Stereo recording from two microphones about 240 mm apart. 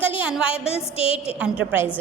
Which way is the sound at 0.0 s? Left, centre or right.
Centre.